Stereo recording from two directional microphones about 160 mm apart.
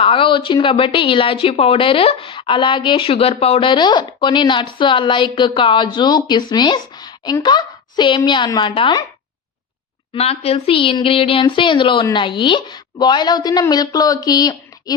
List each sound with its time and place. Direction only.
0.0 s a woman's voice: 35° left (ahead or behind)
10.2 s a woman's voice: 40° left (ahead or behind)